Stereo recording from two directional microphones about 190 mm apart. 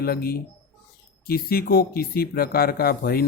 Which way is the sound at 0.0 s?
55° left (ahead or behind).